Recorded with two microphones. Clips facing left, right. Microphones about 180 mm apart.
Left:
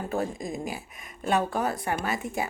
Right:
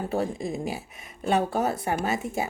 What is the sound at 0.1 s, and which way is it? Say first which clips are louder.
Speech: right 1 dB; 25° right (ahead or behind).